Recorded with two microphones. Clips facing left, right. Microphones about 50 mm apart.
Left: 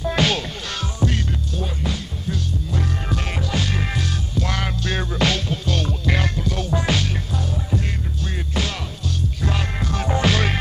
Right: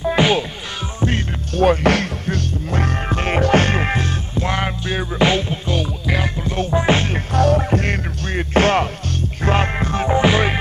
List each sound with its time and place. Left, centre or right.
0.0 s music: centre
0.9 s music: right
1.5 s music: right
5.9 s music: centre
6.4 s music: right
7.3 s music: right
10.0 s music: right